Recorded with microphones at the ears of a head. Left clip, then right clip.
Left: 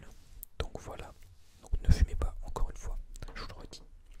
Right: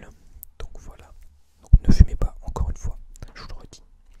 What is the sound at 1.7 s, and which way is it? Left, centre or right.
Whispering, right.